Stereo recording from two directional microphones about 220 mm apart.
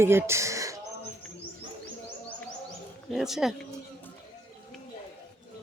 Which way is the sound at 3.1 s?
Centre (ahead or behind).